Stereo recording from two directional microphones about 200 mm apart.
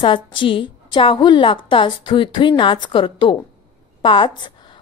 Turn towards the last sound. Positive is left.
turn(degrees=25)  # may be behind; listen again after turning